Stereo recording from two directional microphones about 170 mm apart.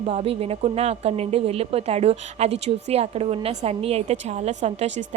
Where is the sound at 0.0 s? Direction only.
35° right (ahead or behind).